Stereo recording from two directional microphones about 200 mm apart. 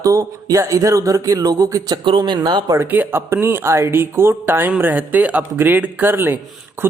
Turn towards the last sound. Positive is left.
turn(degrees=-5)  # may be behind; listen again after turning